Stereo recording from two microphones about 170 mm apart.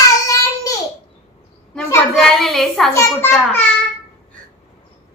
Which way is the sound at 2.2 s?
Centre (ahead or behind).